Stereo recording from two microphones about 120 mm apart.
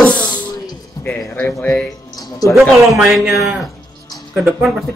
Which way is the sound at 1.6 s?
15° left (ahead or behind).